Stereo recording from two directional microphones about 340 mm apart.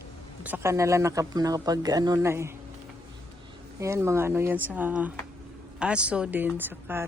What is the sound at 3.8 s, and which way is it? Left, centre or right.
Speech, centre.